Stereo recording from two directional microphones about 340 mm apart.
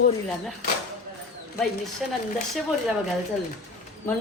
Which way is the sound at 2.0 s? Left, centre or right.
Centre.